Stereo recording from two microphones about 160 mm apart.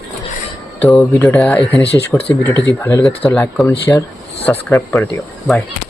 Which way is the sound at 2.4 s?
15° left (ahead or behind).